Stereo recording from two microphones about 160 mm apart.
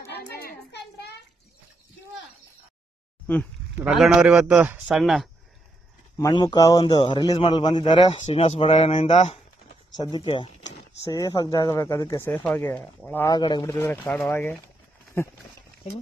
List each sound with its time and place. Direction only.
0.0 s a sound: 85° left
3.8 s a man's voice: 5° right (ahead or behind)
6.1 s a man's voice: 20° left (ahead or behind)
8.2 s speech: 40° left (ahead or behind)
10.0 s speech: 30° left (ahead or behind)
11.1 s a man's voice: 20° left (ahead or behind)
13.3 s speech: 25° left (ahead or behind)